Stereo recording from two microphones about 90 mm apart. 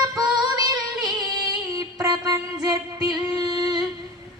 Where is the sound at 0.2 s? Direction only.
45° right (ahead or behind).